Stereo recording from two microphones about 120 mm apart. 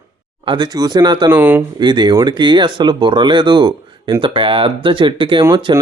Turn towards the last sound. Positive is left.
turn(degrees=-40)  # may be behind; listen again after turning